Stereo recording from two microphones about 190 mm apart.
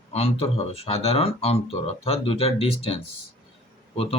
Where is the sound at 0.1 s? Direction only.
30° left (ahead or behind).